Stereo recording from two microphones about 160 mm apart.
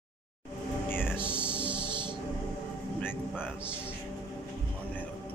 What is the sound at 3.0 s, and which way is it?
Speech, 10° left (ahead or behind).